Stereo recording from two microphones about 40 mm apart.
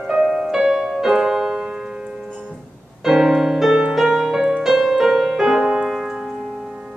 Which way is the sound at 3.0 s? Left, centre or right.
Centre.